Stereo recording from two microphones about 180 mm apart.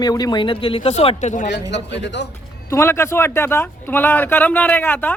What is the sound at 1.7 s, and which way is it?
Speech, 75° left (ahead or behind).